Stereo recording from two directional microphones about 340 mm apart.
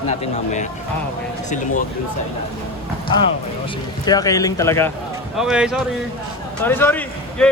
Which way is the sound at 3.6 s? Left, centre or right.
Centre.